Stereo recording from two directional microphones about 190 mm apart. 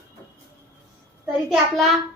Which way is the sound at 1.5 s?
Centre (ahead or behind).